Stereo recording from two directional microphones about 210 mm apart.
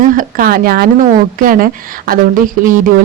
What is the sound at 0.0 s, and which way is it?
Speech, 40° right (ahead or behind).